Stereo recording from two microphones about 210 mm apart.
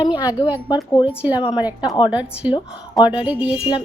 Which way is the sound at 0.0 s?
20° left (ahead or behind).